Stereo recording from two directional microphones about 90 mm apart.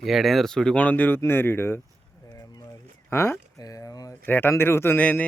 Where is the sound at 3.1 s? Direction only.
25° left (ahead or behind).